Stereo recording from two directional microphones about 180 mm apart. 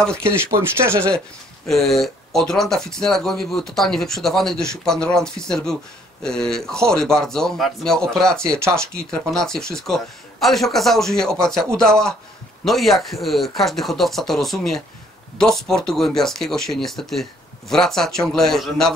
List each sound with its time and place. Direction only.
0.2 s speech: 15° right (ahead or behind)
1.7 s speech: centre (ahead or behind)